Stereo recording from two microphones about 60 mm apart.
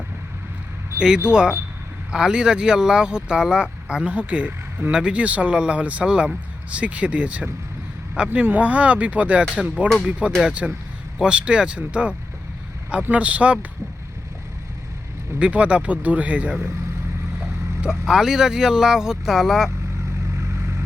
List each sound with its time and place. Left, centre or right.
0.9 s speech: centre
15.4 s speech: right
18.0 s speech: centre